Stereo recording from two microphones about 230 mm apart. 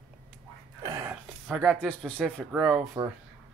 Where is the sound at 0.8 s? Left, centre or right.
Centre.